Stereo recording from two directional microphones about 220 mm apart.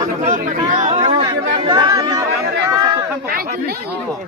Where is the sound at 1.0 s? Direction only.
20° right (ahead or behind).